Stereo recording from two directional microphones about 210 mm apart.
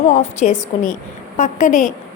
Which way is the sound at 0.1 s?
35° left (ahead or behind).